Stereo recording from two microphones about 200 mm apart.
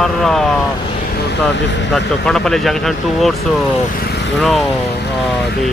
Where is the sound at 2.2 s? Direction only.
5° left (ahead or behind).